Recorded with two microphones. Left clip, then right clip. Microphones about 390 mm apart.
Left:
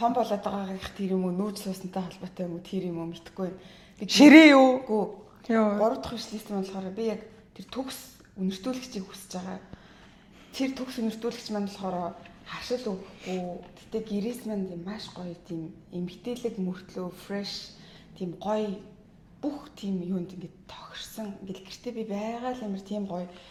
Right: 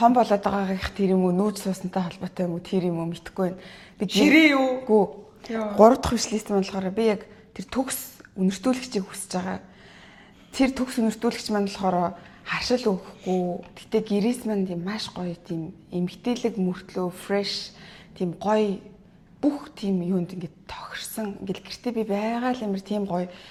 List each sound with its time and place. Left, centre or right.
0.0 s a woman's voice: right
4.2 s a woman's voice: left
5.5 s speech: left
5.8 s a woman's voice: right
13.9 s a woman's voice: right